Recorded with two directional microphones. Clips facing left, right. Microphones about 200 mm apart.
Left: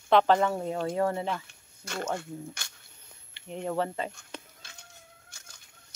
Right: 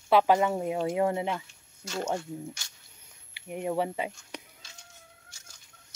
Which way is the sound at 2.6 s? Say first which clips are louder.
Left 5 dB; 60° left (ahead or behind).